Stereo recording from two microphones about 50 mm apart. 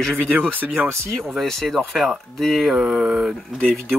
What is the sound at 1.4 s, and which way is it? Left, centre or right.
Speech, centre.